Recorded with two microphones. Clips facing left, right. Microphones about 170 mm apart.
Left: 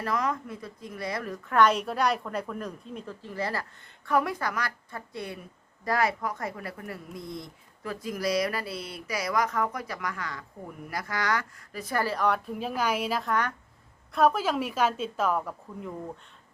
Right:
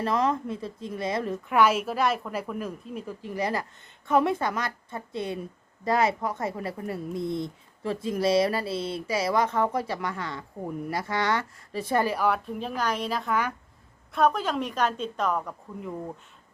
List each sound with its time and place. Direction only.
0.0 s speech: 25° right (ahead or behind)
1.5 s a woman's voice: 5° right (ahead or behind); by 12.0 s 25° right (ahead or behind)
12.0 s a woman's voice: 5° right (ahead or behind)